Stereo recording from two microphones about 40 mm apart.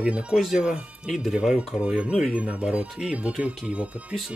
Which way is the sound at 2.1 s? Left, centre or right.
Centre.